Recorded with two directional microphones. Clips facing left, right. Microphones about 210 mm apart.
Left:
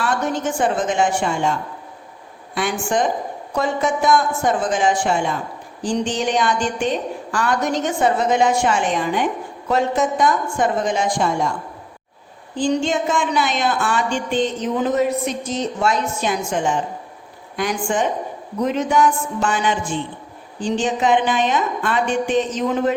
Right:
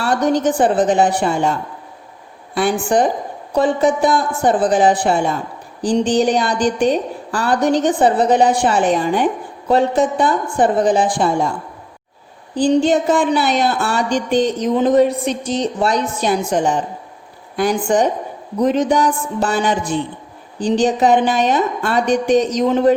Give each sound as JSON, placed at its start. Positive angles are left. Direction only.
{"t": 0.0, "sound": "a woman's voice", "side_deg": -35}
{"t": 2.6, "sound": "a woman's voice", "side_deg": -35}
{"t": 12.5, "sound": "a woman's voice", "side_deg": -35}